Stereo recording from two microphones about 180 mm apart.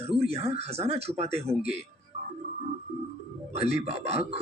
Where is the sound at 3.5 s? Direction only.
35° right (ahead or behind).